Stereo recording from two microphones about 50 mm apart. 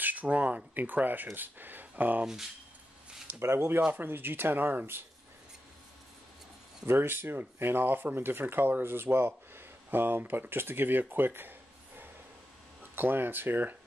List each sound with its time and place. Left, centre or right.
0.0 s speech: right
3.3 s speech: right
6.9 s speech: right
12.9 s speech: right